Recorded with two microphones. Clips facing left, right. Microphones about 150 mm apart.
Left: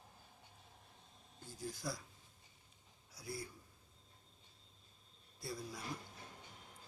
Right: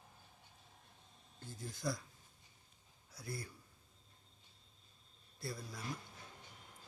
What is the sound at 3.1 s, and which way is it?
Speech, 10° left (ahead or behind).